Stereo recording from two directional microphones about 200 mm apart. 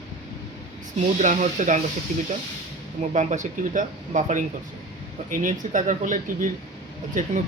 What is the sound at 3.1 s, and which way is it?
Speech, 35° right (ahead or behind).